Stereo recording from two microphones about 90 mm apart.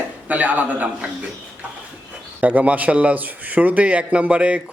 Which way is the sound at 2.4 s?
15° right (ahead or behind).